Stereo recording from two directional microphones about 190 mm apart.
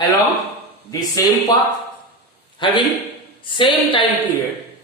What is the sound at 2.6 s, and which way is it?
Speech, 25° left (ahead or behind).